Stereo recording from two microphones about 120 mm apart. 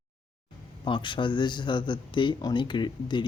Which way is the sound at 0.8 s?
40° left (ahead or behind).